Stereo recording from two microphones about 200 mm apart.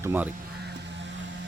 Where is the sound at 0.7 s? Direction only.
65° right (ahead or behind).